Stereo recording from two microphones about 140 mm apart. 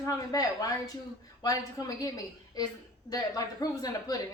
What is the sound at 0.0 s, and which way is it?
Speech, 25° left (ahead or behind).